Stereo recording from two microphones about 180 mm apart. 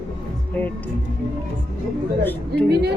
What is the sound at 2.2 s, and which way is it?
Speech, 10° left (ahead or behind).